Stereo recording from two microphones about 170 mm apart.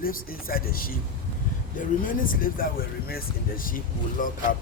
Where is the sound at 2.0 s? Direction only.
55° left (ahead or behind).